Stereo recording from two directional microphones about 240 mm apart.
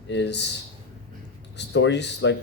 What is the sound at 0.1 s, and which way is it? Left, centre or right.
Speech, left.